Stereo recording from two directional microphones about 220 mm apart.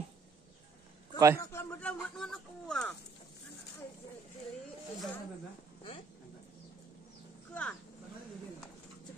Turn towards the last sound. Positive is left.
turn(degrees=5)  # may be behind; listen again after turning